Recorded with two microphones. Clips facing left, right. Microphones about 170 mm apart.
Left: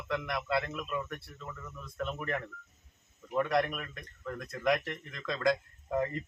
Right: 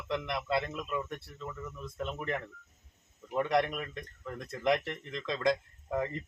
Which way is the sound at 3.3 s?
20° right (ahead or behind).